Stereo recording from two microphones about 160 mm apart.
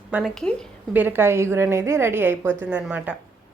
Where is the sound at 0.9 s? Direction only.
10° right (ahead or behind).